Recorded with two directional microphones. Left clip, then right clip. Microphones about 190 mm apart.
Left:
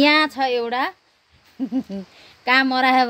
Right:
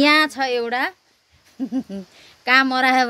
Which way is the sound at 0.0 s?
5° right (ahead or behind).